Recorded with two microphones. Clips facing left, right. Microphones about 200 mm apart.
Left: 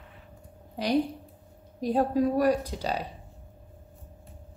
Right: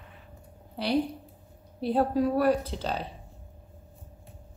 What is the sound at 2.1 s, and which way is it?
Speech, 15° left (ahead or behind).